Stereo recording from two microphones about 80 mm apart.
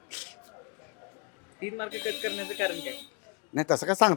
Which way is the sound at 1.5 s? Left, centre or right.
Left.